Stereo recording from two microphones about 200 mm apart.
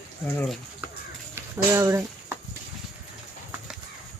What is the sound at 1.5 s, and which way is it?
Speech, 15° right (ahead or behind).